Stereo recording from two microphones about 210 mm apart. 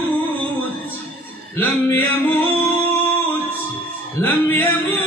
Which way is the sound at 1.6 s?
10° left (ahead or behind).